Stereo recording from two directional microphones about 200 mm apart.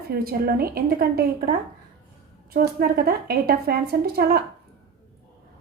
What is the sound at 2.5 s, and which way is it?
A woman's voice, 50° right (ahead or behind).